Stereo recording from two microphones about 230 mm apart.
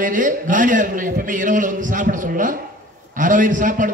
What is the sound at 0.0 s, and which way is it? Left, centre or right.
A man's voice, right.